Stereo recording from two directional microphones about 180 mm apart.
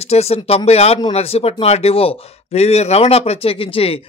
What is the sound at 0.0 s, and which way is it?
Speech, 35° left (ahead or behind).